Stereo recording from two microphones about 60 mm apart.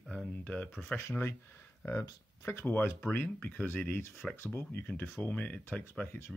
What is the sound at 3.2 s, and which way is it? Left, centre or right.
Speech, left.